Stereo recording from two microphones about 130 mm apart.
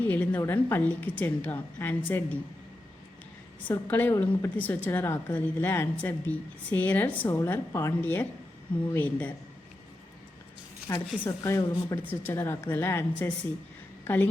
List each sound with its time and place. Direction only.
0.0 s a woman's voice: 10° left (ahead or behind)
3.7 s a woman's voice: 15° left (ahead or behind)
10.9 s a woman's voice: 25° left (ahead or behind)